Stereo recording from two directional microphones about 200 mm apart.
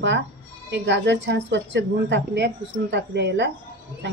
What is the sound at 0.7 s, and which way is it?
A woman's voice, 60° right (ahead or behind).